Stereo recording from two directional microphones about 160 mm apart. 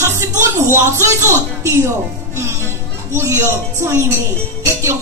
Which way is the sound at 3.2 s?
20° right (ahead or behind).